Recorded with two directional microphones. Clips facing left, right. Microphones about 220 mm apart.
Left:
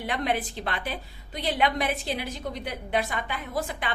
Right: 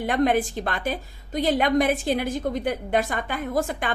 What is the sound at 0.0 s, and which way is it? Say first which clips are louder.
A woman's voice: right 7 dB; 45° right (ahead or behind).